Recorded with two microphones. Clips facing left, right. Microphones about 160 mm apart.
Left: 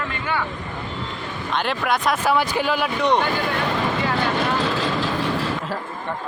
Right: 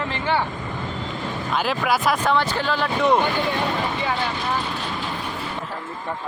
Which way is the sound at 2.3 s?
10° left (ahead or behind).